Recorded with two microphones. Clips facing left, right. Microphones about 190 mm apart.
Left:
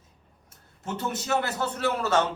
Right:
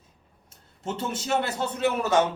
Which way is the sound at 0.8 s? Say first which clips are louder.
Right 1 dB; 25° right (ahead or behind).